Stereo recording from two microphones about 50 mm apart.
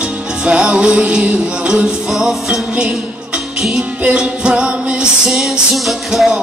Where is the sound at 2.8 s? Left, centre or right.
Right.